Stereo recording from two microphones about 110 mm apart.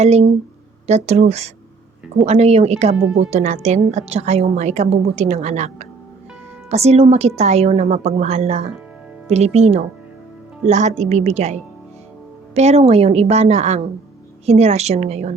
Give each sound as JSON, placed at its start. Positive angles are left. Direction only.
{"t": 0.0, "sound": "a woman's voice", "side_deg": -75}
{"t": 6.7, "sound": "a woman's voice", "side_deg": -75}
{"t": 10.7, "sound": "a woman's voice", "side_deg": -90}